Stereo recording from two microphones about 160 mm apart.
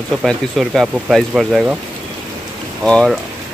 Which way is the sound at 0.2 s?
Centre (ahead or behind).